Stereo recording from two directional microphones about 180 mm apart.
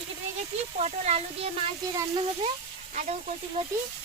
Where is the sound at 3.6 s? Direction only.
25° right (ahead or behind).